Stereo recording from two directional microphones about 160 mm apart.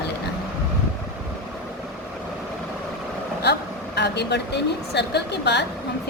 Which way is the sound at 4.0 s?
90° left.